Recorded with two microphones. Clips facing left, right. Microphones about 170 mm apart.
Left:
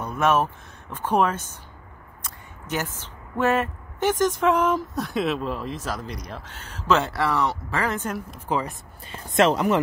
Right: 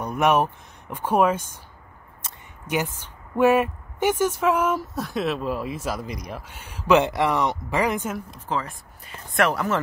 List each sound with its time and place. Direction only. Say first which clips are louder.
0.0 s speech: right 1 dB; 15° right (ahead or behind)
2.6 s a woman's voice: right 3 dB; 10° right (ahead or behind)
8.5 s speech: left 2 dB; 15° left (ahead or behind)